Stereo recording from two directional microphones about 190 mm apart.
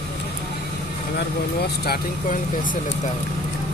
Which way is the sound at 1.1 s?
55° left (ahead or behind).